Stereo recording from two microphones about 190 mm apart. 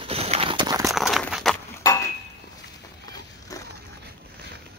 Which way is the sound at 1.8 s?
20° left (ahead or behind).